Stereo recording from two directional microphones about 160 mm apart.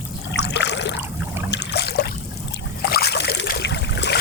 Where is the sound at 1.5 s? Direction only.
90° left.